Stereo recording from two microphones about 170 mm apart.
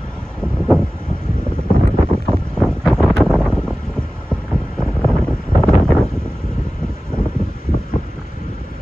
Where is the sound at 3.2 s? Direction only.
5° left (ahead or behind).